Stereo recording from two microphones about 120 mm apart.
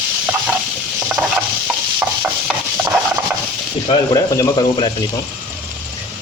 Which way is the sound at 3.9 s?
45° left (ahead or behind).